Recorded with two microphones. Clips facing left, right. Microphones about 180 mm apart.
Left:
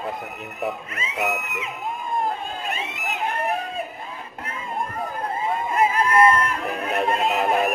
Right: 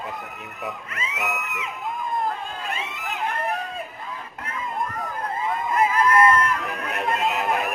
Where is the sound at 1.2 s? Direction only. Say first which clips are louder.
Left 5 dB; 35° left (ahead or behind).